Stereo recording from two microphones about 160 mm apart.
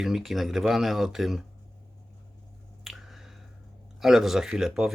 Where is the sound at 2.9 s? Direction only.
Centre (ahead or behind).